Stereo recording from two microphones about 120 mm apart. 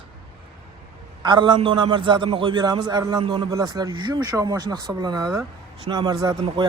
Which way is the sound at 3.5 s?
30° right (ahead or behind).